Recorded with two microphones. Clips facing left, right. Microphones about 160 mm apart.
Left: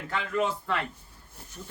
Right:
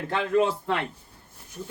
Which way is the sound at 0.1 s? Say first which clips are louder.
Right 5 dB; 25° right (ahead or behind).